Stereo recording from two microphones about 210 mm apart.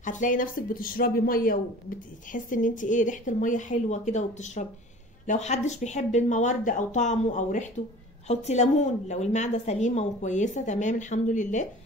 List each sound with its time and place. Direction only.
0.0 s speech: 35° left (ahead or behind)